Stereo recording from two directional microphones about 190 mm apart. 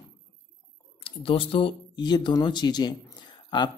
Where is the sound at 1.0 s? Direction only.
30° left (ahead or behind).